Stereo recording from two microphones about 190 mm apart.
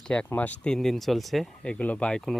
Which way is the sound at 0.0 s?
5° left (ahead or behind).